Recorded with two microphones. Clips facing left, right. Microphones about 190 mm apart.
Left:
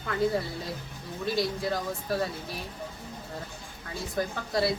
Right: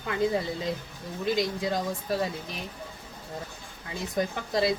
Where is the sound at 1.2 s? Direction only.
15° right (ahead or behind).